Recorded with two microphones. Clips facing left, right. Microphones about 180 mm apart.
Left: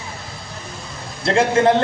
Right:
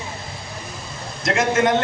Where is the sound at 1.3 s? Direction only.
30° left (ahead or behind).